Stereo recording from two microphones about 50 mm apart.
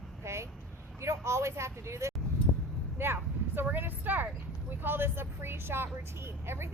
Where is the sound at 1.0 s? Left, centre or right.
Right.